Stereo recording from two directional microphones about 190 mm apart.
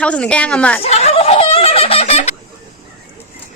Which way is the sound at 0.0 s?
5° left (ahead or behind).